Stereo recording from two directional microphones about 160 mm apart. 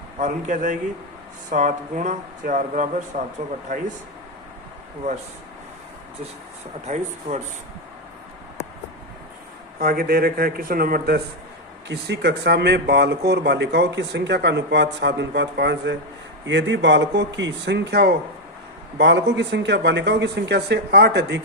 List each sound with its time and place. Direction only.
0.2 s speech: 50° right (ahead or behind)
5.0 s speech: 50° right (ahead or behind)
6.8 s speech: 45° right (ahead or behind)
9.8 s speech: 70° right (ahead or behind)
11.9 s speech: 90° right